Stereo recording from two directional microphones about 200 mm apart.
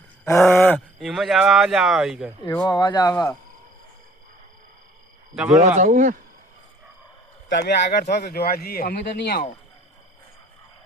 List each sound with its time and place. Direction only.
0.3 s speech: 15° left (ahead or behind); by 2.3 s centre (ahead or behind)
2.4 s speech: 20° left (ahead or behind)
5.3 s speech: centre (ahead or behind)
5.7 s speech: 40° right (ahead or behind)
7.5 s speech: 55° left (ahead or behind)